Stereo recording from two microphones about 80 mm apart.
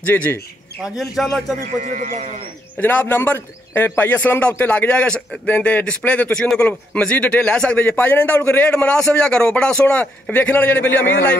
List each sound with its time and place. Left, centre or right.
0.0 s a man's voice: left
0.8 s a man's voice: centre
2.8 s a man's voice: left